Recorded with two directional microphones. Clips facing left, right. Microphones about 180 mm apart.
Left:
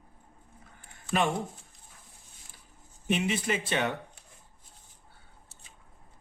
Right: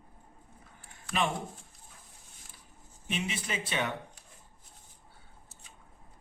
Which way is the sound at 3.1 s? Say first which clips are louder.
Left 7 dB; 55° left (ahead or behind).